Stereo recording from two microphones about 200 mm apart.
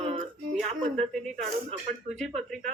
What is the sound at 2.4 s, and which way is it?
Speech, centre (ahead or behind).